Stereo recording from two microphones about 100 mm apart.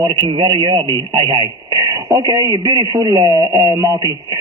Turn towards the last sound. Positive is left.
turn(degrees=-40)  # may be behind; listen again after turning